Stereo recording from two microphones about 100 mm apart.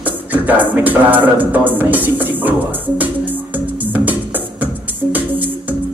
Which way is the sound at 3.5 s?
15° right (ahead or behind).